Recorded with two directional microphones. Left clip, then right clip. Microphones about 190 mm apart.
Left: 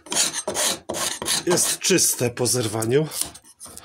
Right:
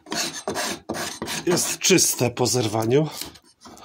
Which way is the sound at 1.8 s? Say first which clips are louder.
Right 1 dB; 25° right (ahead or behind).